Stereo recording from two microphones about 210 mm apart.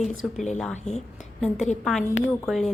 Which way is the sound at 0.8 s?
30° left (ahead or behind).